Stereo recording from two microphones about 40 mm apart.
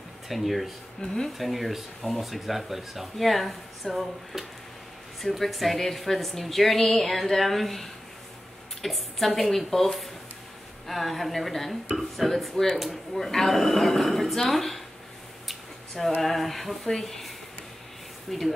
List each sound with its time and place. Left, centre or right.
0.3 s speech: centre
1.0 s speech: centre
1.4 s speech: centre
10.9 s speech: centre
15.4 s a sound: centre
16.2 s speech: centre
18.3 s speech: centre